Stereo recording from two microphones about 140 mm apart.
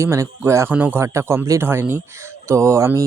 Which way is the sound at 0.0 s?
20° right (ahead or behind).